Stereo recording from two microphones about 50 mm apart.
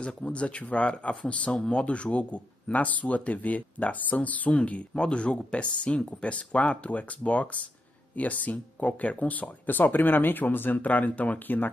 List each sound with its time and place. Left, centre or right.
0.0 s speech: left